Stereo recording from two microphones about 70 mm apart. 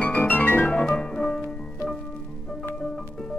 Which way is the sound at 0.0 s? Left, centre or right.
Left.